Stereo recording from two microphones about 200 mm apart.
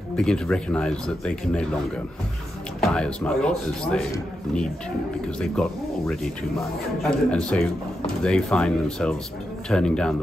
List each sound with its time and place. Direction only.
0.1 s a man's voice: 5° left (ahead or behind)
2.8 s a man's voice: 5° left (ahead or behind)
5.4 s a man's voice: 5° left (ahead or behind)